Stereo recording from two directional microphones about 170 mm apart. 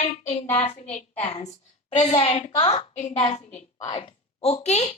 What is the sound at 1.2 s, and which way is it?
A woman's voice, 40° left (ahead or behind).